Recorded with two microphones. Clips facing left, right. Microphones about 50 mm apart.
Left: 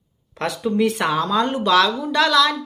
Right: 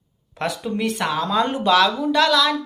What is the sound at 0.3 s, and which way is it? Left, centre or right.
Speech, centre.